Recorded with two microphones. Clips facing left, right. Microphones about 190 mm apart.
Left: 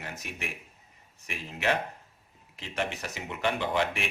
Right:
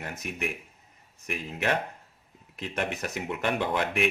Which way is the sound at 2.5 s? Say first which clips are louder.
Right 2 dB; 55° right (ahead or behind).